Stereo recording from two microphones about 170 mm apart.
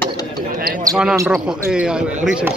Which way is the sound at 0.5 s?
60° right (ahead or behind).